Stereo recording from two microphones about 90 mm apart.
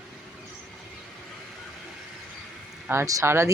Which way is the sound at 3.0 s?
40° right (ahead or behind).